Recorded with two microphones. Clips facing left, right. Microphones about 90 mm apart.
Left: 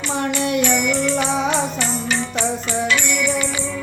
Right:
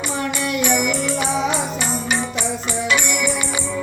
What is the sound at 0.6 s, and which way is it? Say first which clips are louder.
Music: left 1 dB; 10° right (ahead or behind).